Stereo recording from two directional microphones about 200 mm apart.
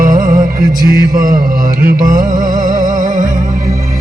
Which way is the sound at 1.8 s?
45° right (ahead or behind).